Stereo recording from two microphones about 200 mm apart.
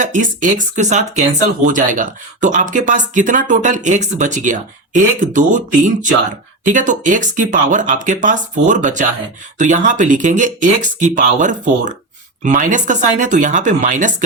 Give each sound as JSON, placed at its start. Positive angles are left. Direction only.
{"t": 0.0, "sound": "speech", "side_deg": -40}